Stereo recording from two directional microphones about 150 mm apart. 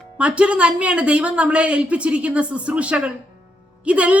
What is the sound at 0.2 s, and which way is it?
Speech, 10° right (ahead or behind).